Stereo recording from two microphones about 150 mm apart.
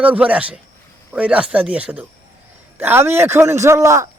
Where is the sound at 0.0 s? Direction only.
10° right (ahead or behind).